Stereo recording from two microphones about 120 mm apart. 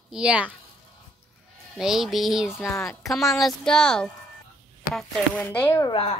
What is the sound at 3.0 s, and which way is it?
Speech, centre (ahead or behind).